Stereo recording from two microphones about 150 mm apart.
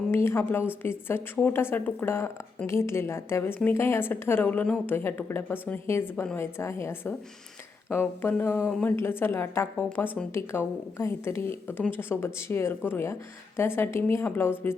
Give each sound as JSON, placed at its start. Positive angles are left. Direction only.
{"t": 0.1, "sound": "speech", "side_deg": 15}
{"t": 9.0, "sound": "speech", "side_deg": 15}